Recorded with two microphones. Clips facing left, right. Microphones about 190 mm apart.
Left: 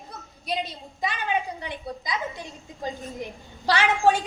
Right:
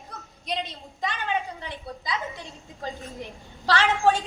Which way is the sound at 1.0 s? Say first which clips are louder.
Left 1 dB; 10° left (ahead or behind).